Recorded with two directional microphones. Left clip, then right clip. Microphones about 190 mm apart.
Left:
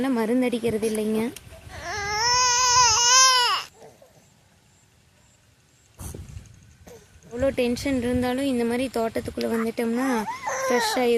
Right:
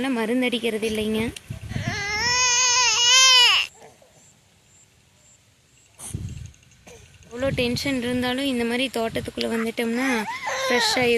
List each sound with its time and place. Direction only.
0.0 s a woman's voice: 10° left (ahead or behind)
1.3 s babbling: 35° left (ahead or behind)
2.2 s baby cry: 40° left (ahead or behind)
7.3 s speech: 5° left (ahead or behind)